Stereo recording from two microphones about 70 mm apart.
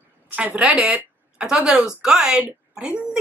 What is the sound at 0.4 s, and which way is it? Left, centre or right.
Speech, centre.